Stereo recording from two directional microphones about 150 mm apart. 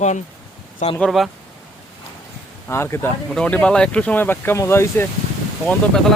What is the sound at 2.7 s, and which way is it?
Speech, 15° left (ahead or behind).